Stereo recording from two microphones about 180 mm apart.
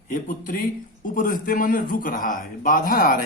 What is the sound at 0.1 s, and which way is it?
A man's voice, 50° left (ahead or behind).